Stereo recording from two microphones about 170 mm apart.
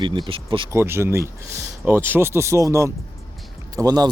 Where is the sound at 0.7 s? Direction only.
15° right (ahead or behind).